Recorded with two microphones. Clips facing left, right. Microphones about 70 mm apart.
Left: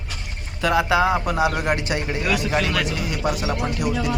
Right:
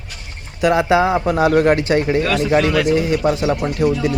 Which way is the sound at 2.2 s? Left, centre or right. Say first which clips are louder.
Right 6 dB; centre.